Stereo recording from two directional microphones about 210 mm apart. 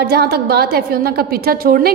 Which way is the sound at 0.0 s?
50° right (ahead or behind).